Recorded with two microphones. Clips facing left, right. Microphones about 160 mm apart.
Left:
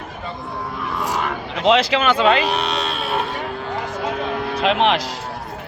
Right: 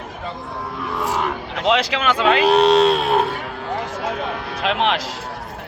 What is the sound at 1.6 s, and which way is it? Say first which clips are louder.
Speech: left 3 dB; 5° right (ahead or behind).